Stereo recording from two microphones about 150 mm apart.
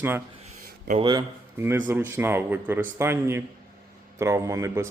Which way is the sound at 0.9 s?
30° right (ahead or behind).